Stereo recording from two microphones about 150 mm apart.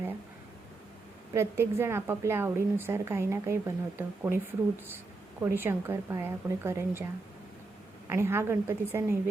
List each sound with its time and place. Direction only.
1.3 s a woman's voice: 15° right (ahead or behind)
5.4 s a woman's voice: 15° right (ahead or behind)
8.1 s a woman's voice: 15° right (ahead or behind)